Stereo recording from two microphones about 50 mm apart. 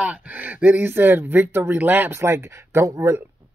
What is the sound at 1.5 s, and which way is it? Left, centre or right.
Speech, right.